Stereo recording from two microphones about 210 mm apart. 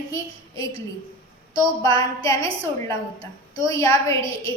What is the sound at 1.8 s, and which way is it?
Speech, 15° left (ahead or behind).